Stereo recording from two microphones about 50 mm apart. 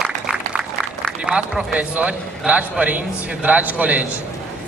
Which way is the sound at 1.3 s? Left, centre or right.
Right.